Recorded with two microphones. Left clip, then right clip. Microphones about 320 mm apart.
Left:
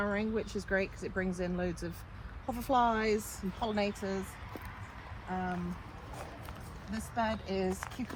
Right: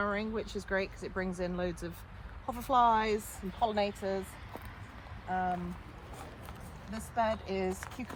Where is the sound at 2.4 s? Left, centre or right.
Right.